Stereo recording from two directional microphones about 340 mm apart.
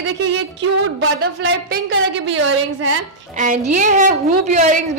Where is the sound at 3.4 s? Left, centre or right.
Right.